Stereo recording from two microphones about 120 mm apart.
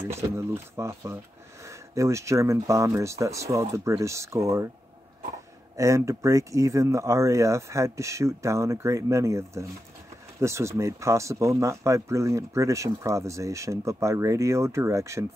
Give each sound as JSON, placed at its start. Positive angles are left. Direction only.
{"t": 0.1, "sound": "speech", "side_deg": -20}
{"t": 5.8, "sound": "speech", "side_deg": -25}